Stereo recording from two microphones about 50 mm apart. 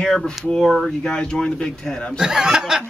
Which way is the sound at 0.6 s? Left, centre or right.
Centre.